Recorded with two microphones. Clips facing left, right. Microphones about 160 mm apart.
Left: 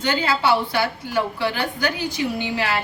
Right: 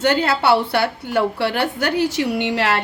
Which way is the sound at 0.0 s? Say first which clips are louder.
Right 4 dB; 65° right (ahead or behind).